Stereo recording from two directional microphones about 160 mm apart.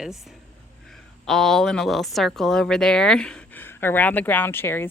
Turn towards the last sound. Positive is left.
turn(degrees=15)  # may be behind; listen again after turning